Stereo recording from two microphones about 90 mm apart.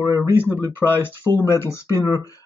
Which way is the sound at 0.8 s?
25° left (ahead or behind).